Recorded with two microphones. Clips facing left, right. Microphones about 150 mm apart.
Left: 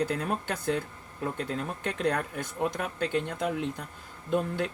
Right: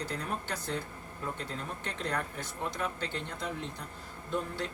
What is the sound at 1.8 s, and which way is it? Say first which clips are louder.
Speech: left 7 dB; 55° left (ahead or behind).